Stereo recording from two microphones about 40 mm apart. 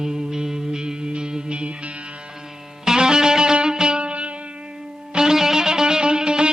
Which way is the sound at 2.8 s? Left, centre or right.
Centre.